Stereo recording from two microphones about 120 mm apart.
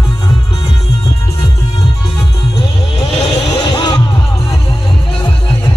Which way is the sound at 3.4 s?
40° left (ahead or behind).